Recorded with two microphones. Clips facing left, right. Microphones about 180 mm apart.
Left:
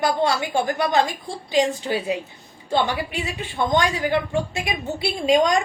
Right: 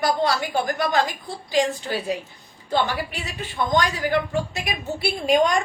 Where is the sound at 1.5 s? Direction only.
25° left (ahead or behind).